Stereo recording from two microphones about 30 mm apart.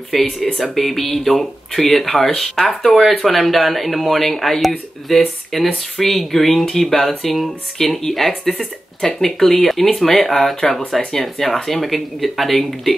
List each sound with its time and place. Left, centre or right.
0.1 s speech: centre
2.9 s speech: centre
8.3 s speech: left
9.2 s speech: centre
11.0 s speech: centre
11.4 s speech: centre